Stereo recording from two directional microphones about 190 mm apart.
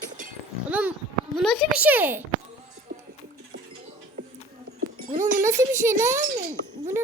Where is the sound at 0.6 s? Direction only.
10° right (ahead or behind).